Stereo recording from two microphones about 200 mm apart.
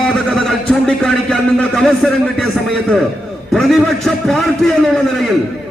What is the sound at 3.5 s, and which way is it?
A man's voice, centre (ahead or behind).